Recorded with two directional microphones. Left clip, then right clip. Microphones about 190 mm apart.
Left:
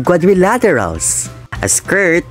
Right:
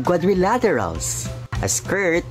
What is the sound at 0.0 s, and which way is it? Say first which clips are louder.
Speech: left 8 dB; 30° left (ahead or behind).